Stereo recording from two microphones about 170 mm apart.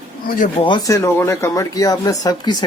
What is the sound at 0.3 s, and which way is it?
Speech, 50° left (ahead or behind).